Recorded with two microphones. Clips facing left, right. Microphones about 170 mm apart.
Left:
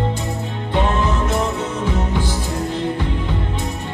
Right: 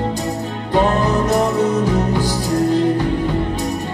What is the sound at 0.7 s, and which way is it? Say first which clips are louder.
Music: right 4 dB; 40° right (ahead or behind).